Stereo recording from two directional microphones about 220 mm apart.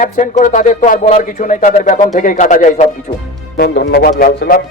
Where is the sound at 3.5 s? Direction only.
50° left (ahead or behind).